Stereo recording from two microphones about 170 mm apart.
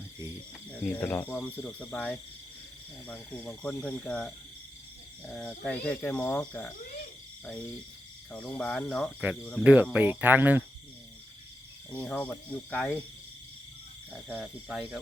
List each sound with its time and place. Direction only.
0.7 s speech: 10° left (ahead or behind)
5.6 s speech: 10° left (ahead or behind)
6.7 s hoot: 60° left (ahead or behind)
8.3 s speech: 5° left (ahead or behind)
9.6 s speech: 10° right (ahead or behind)
11.9 s speech: 10° left (ahead or behind)
14.1 s speech: 5° right (ahead or behind)